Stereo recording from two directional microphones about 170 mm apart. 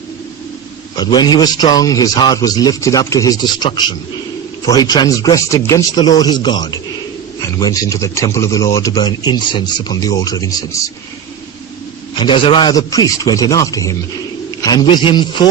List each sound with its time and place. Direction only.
0.9 s speech: 25° left (ahead or behind)
12.2 s speech: 30° left (ahead or behind)